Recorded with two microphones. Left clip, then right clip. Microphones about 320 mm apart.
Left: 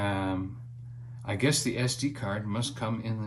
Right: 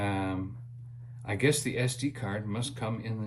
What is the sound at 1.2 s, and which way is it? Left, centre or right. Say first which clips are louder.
Speech: even; centre.